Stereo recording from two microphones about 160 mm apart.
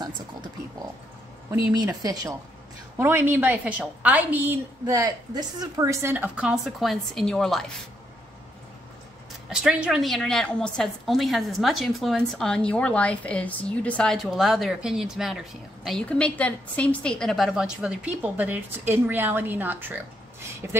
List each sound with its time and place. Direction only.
1.5 s a woman's voice: 20° right (ahead or behind); by 7.7 s centre (ahead or behind)
9.5 s a woman's voice: 5° right (ahead or behind)